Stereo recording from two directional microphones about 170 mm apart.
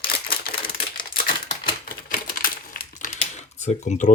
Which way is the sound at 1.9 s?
55° left (ahead or behind).